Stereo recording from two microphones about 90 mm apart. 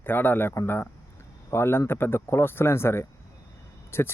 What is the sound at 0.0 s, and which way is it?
Speech, 20° left (ahead or behind).